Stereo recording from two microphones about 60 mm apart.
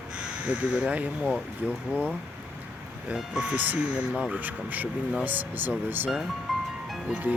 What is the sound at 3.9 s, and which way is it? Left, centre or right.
Speech, centre.